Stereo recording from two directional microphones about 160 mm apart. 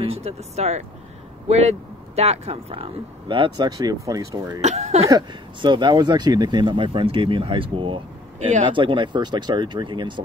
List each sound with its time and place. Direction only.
0.0 s speech: 40° right (ahead or behind); by 4.6 s 20° right (ahead or behind)
4.6 s speech: 45° right (ahead or behind)
5.0 s speech: 25° right (ahead or behind)